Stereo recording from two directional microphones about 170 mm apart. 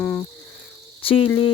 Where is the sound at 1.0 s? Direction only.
30° left (ahead or behind).